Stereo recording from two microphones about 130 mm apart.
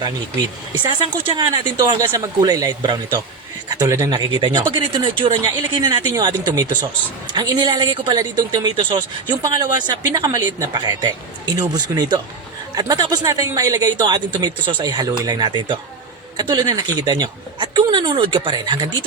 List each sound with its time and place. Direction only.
1.3 s a man's voice: 35° right (ahead or behind)
7.3 s a man's voice: 35° right (ahead or behind)